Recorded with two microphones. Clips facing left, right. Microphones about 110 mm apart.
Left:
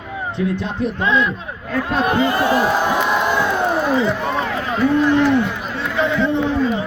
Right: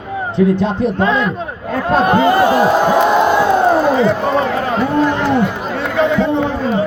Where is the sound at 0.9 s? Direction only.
45° right (ahead or behind).